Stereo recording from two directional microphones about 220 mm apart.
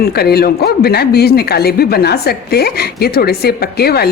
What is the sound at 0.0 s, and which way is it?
Speech, 45° left (ahead or behind).